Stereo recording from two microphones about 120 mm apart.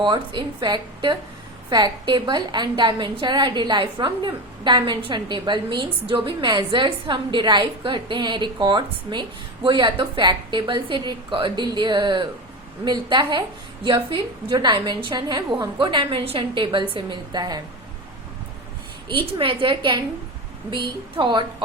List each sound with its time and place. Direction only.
0.0 s a woman's voice: 40° right (ahead or behind)
19.0 s a woman's voice: 45° right (ahead or behind)